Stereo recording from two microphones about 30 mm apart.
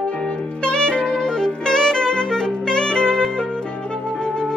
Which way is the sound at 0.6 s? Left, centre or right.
Left.